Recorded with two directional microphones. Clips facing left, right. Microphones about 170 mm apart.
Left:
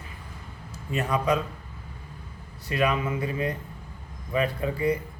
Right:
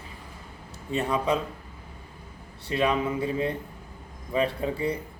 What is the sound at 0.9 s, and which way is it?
Speech, 25° right (ahead or behind).